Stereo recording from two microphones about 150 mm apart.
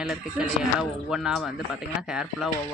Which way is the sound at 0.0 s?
5° right (ahead or behind).